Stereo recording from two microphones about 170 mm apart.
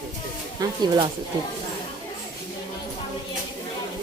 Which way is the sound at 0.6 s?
20° right (ahead or behind).